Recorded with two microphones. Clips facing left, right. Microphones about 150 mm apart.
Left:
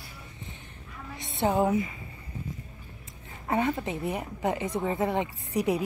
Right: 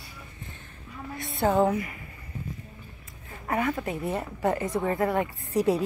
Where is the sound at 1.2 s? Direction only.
20° left (ahead or behind).